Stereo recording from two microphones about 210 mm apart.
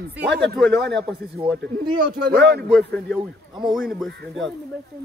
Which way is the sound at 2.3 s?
50° right (ahead or behind).